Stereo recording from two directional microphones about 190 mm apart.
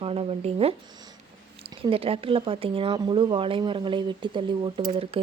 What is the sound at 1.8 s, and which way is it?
Speech, 30° right (ahead or behind).